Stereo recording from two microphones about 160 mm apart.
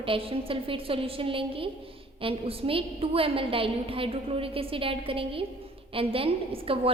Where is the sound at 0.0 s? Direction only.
35° right (ahead or behind).